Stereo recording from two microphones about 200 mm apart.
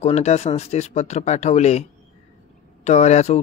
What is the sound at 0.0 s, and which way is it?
A man's voice, 35° left (ahead or behind).